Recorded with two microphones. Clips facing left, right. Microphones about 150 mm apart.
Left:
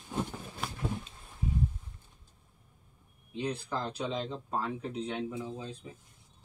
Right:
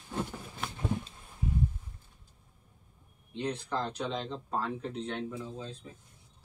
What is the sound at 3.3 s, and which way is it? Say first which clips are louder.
Speech: right 1 dB; 5° left (ahead or behind).